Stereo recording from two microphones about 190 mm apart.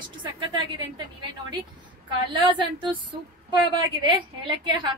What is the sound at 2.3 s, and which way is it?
Speech, 25° right (ahead or behind).